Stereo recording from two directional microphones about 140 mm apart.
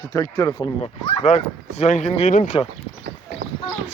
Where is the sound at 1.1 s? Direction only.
50° left (ahead or behind); by 2.5 s 70° left (ahead or behind).